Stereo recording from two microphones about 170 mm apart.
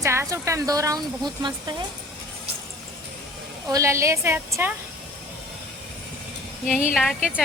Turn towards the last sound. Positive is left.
turn(degrees=-5)  # may be behind; listen again after turning